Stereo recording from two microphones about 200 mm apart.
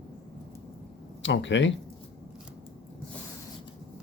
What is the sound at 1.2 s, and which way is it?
Speech, 65° left (ahead or behind).